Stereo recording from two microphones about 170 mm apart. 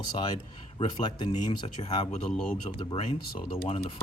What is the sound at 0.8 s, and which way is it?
Speech, 25° left (ahead or behind).